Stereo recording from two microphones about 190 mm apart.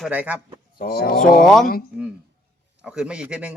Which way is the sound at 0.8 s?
55° left (ahead or behind).